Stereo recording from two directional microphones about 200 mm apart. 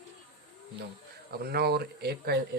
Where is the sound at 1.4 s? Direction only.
50° right (ahead or behind).